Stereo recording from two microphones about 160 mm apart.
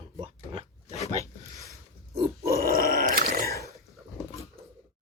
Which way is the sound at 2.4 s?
70° right (ahead or behind).